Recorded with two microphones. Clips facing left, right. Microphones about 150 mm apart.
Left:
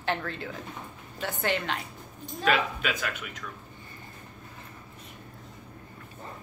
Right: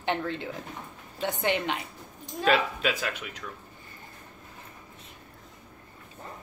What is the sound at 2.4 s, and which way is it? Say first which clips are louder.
Speech: right 2 dB; 30° right (ahead or behind).